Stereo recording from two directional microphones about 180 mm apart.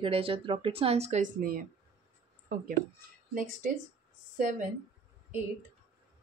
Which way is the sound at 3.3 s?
50° right (ahead or behind).